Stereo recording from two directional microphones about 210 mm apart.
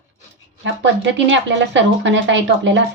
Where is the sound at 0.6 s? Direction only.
60° right (ahead or behind).